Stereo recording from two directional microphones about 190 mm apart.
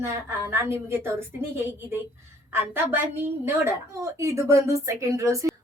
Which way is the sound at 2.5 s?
10° right (ahead or behind).